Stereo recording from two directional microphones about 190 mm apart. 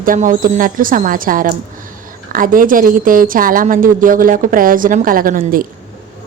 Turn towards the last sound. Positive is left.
turn(degrees=-45)  # may be behind; listen again after turning